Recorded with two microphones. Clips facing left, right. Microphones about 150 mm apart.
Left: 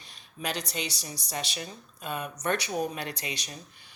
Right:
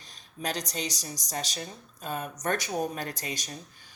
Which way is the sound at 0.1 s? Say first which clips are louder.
Right 1 dB; 40° right (ahead or behind).